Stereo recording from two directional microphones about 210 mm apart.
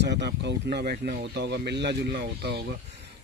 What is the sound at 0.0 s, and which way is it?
Speech, 55° right (ahead or behind).